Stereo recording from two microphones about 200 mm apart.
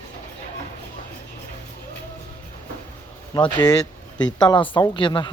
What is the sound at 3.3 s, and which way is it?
A woman's voice, 20° left (ahead or behind).